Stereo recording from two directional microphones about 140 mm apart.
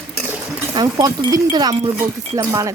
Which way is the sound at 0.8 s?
30° right (ahead or behind).